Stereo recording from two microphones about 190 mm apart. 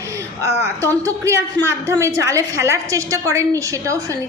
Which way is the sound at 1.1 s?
15° right (ahead or behind).